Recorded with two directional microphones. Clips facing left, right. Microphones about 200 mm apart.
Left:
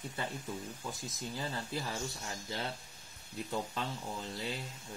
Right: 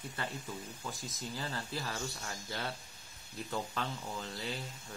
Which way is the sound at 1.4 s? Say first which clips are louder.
Left 2 dB; 20° left (ahead or behind).